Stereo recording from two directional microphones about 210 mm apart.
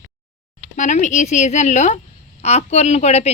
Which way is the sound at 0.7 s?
35° left (ahead or behind).